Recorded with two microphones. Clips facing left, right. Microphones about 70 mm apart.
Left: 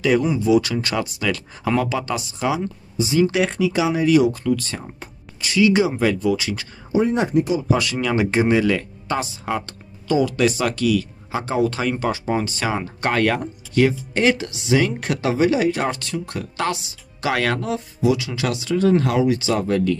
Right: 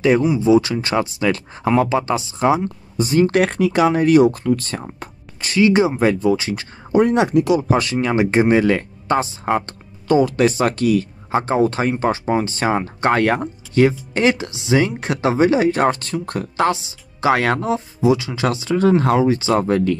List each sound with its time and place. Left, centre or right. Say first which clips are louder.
0.4 s speech: right 3 dB; right
6.9 s speech: right 4 dB; right
7.6 s speech: right 3 dB; right